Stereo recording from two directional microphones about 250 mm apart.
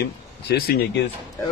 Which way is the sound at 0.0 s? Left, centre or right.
Left.